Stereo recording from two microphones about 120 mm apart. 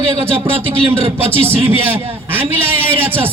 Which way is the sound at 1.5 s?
20° right (ahead or behind).